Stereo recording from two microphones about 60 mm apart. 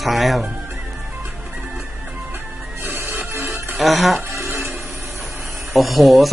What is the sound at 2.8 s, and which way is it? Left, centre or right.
Music, right.